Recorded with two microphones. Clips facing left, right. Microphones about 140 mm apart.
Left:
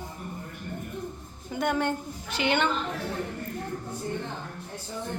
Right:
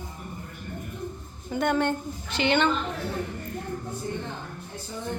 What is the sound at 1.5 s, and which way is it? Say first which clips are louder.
A woman's voice: right 2 dB; 5° left (ahead or behind).